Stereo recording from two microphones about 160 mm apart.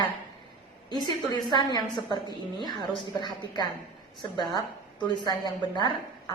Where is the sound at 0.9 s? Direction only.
30° left (ahead or behind).